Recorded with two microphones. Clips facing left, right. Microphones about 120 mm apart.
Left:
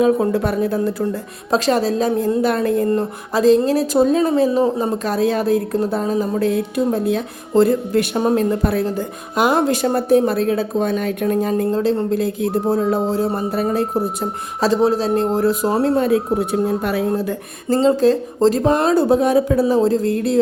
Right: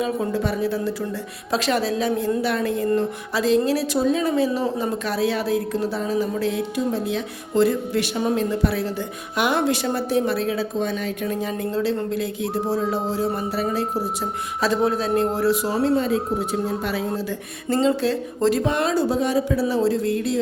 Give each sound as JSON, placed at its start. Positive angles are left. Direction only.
{"t": 0.0, "sound": "a woman's voice", "side_deg": 55}
{"t": 1.5, "sound": "a woman's voice", "side_deg": 40}
{"t": 14.6, "sound": "speech", "side_deg": 35}
{"t": 17.7, "sound": "speech", "side_deg": 35}
{"t": 18.9, "sound": "a woman's voice", "side_deg": 55}